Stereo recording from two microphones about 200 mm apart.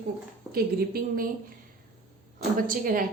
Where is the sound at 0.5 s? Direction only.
50° right (ahead or behind).